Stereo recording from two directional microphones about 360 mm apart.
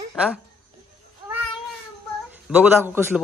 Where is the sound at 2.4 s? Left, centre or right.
Centre.